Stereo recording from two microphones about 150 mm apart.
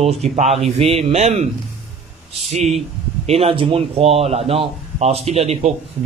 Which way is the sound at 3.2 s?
40° right (ahead or behind).